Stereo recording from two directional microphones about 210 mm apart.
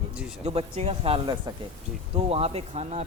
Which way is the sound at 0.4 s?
30° right (ahead or behind).